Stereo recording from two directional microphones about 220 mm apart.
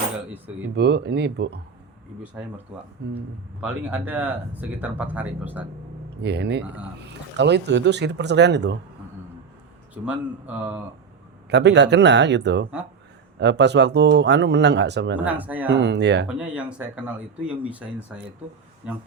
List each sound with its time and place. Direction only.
0.8 s speech: 50° right (ahead or behind)
2.4 s speech: 10° right (ahead or behind)
3.6 s speech: 5° right (ahead or behind)
6.2 s speech: 50° right (ahead or behind)
9.9 s speech: 5° right (ahead or behind)
11.4 s speech: 50° right (ahead or behind)
15.2 s speech: 5° right (ahead or behind)
15.7 s speech: 50° right (ahead or behind)
16.2 s speech: 5° right (ahead or behind)